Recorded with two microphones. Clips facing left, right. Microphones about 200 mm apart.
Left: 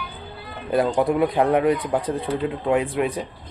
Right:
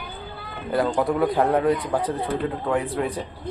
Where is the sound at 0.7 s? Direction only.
20° left (ahead or behind).